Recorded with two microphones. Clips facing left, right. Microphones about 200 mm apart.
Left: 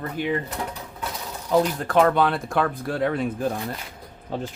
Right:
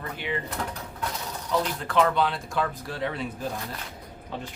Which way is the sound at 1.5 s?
50° left (ahead or behind).